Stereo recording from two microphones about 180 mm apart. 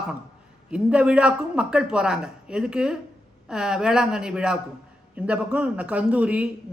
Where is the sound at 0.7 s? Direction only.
5° right (ahead or behind).